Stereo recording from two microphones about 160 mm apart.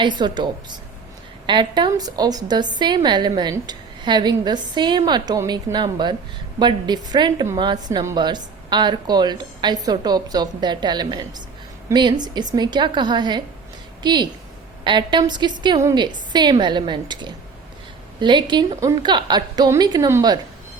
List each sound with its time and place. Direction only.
0.0 s a woman's voice: 30° right (ahead or behind)
1.5 s a woman's voice: 30° right (ahead or behind)